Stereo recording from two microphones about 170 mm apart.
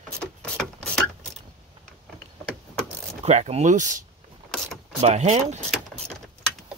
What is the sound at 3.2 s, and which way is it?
Speech, 40° right (ahead or behind).